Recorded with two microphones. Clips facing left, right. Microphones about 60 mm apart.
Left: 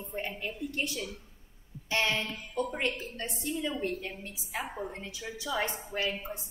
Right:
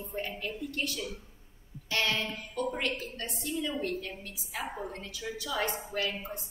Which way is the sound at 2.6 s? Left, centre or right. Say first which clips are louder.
Left 1 dB; left.